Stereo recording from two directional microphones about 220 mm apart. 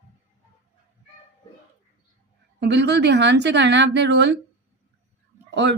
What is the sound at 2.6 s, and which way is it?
A woman's voice, 50° right (ahead or behind).